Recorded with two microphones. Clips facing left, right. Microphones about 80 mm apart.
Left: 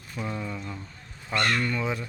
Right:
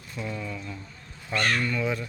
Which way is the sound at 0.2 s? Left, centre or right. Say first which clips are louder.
Left 1 dB; left.